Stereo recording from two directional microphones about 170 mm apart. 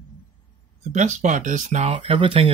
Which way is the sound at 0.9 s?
45° right (ahead or behind).